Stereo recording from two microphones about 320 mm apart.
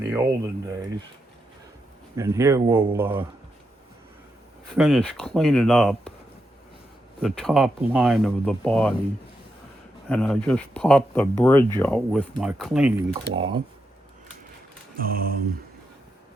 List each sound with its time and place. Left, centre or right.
0.1 s speech: centre
2.1 s speech: centre
4.7 s speech: centre
7.2 s speech: centre
10.1 s speech: centre
13.1 s speech: centre
14.9 s mantra: right